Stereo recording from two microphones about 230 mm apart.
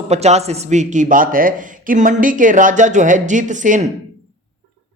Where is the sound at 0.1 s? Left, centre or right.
Right.